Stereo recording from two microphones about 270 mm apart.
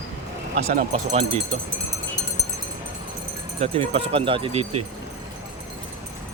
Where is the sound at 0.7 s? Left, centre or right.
Right.